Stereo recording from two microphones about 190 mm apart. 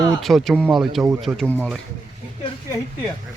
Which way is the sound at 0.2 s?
Centre (ahead or behind).